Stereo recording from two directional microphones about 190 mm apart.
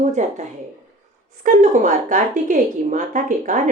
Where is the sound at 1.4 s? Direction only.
40° right (ahead or behind).